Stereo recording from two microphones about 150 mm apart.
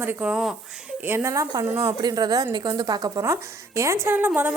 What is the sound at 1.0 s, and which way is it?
Speech, 15° right (ahead or behind).